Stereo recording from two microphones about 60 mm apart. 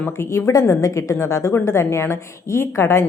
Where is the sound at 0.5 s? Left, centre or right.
Left.